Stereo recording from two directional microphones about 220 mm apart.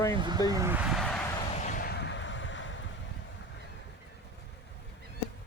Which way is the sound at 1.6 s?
40° left (ahead or behind).